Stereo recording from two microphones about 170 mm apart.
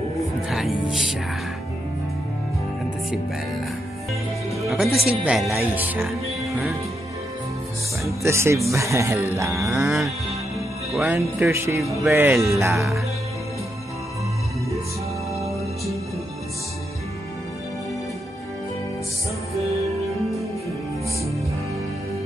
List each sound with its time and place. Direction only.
0.5 s speech: 5° right (ahead or behind)
4.6 s speech: centre (ahead or behind)
8.0 s speech: 15° right (ahead or behind)
9.8 s speech: centre (ahead or behind)
11.1 s speech: 15° right (ahead or behind)